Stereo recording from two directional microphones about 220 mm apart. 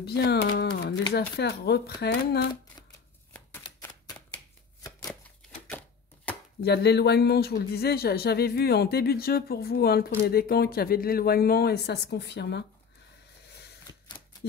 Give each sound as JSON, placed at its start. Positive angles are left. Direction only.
{"t": 0.0, "sound": "speech", "side_deg": 50}
{"t": 5.7, "sound": "typewriter", "side_deg": 5}
{"t": 6.6, "sound": "speech", "side_deg": 50}
{"t": 13.9, "sound": "a sound", "side_deg": 15}